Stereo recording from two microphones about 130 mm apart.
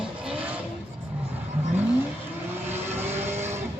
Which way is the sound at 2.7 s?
15° right (ahead or behind).